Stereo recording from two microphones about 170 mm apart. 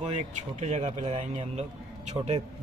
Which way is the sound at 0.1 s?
40° right (ahead or behind).